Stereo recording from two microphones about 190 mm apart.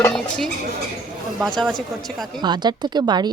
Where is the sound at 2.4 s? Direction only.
20° right (ahead or behind).